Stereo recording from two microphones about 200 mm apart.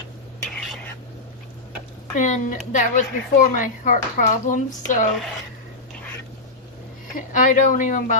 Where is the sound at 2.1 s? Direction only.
40° left (ahead or behind).